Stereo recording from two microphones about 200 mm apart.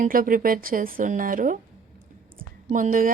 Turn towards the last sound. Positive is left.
turn(degrees=-40)  # may be behind; listen again after turning